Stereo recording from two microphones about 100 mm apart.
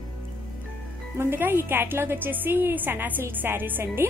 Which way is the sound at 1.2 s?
20° right (ahead or behind).